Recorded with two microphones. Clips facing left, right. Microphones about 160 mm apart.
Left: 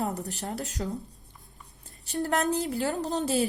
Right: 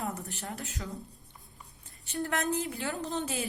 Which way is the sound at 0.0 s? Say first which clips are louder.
Left 5 dB; 40° left (ahead or behind).